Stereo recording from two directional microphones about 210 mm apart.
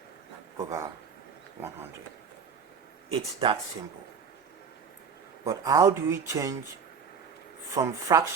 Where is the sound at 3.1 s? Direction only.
25° right (ahead or behind).